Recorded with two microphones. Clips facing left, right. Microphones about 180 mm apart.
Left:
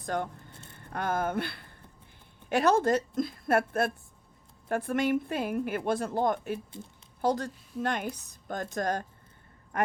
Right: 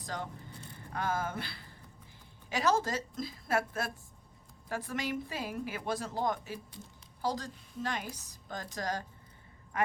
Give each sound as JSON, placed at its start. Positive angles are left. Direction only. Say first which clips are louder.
{"t": 0.0, "sound": "speech", "louder": "left 7 dB", "side_deg": 55}